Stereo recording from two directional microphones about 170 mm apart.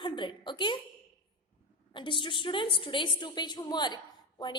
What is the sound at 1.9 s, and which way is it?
A woman's voice, 30° left (ahead or behind).